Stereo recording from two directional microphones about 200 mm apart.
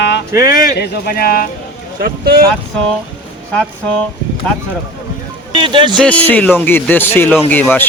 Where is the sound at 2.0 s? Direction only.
50° right (ahead or behind).